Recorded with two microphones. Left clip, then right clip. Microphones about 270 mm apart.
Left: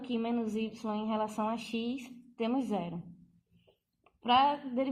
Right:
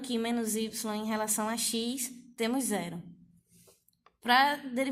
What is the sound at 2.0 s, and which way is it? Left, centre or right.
Speech, right.